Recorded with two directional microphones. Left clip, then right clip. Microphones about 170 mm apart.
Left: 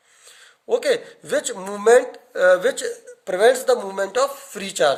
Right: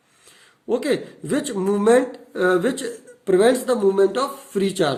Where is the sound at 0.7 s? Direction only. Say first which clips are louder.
Left 2 dB; 30° left (ahead or behind).